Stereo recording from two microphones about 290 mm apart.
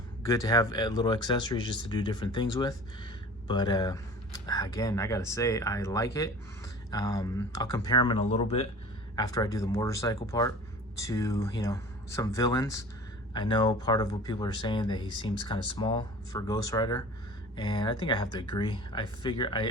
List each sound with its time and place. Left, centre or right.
0.3 s speech: centre